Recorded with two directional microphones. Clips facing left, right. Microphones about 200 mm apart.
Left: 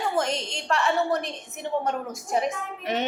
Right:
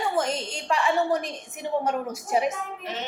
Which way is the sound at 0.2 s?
5° right (ahead or behind).